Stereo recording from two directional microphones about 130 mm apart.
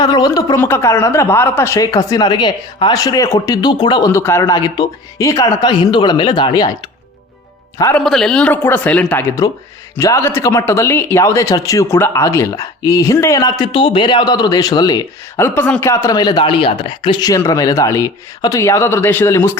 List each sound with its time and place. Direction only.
0.0 s speech: 30° left (ahead or behind)
0.6 s speech: 20° left (ahead or behind)
4.1 s speech: 20° left (ahead or behind)
7.9 s a man's voice: 5° left (ahead or behind)
10.0 s speech: 20° left (ahead or behind)
13.7 s speech: 40° left (ahead or behind)
15.4 s a man's voice: 15° left (ahead or behind)
15.9 s speech: 25° left (ahead or behind)